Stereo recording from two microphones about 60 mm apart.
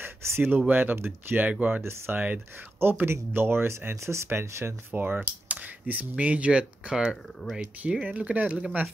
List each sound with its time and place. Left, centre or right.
0.0 s speech: right
4.9 s speech: right